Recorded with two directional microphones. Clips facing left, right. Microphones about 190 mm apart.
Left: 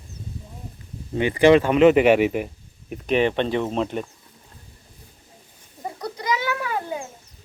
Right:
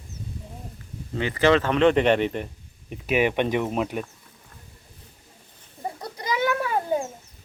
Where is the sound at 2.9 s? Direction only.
5° right (ahead or behind).